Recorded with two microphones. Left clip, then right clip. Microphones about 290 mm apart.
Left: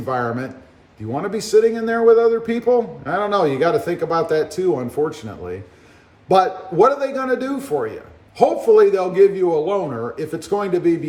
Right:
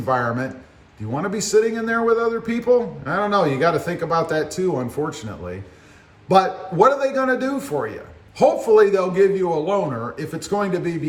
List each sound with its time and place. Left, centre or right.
0.0 s a man's voice: centre